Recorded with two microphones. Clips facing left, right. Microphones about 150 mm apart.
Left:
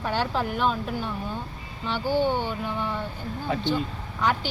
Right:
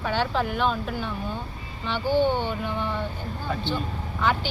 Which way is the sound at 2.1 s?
10° left (ahead or behind).